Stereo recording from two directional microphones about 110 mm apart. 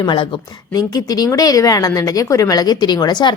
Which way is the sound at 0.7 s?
35° left (ahead or behind).